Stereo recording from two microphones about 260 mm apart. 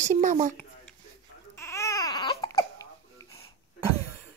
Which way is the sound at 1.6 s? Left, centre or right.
Centre.